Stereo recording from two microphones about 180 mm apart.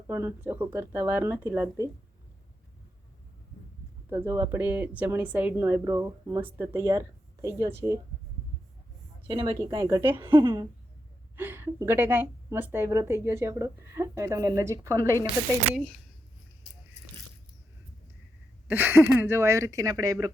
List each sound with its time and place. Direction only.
0.1 s a woman's voice: 15° right (ahead or behind)
4.1 s a woman's voice: 15° right (ahead or behind)
9.2 s a woman's voice: 30° right (ahead or behind)
9.7 s a woman's voice: 15° right (ahead or behind)
15.7 s speech: centre (ahead or behind)
18.7 s a woman's voice: 10° right (ahead or behind)